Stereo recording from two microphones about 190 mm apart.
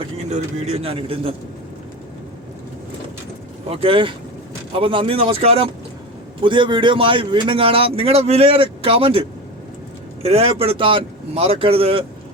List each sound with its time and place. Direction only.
0.0 s a man's voice: 35° right (ahead or behind)
3.7 s a man's voice: 30° right (ahead or behind)
10.2 s a man's voice: 30° right (ahead or behind)